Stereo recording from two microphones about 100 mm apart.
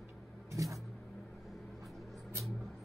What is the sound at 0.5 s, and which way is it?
Vehicle, 30° right (ahead or behind).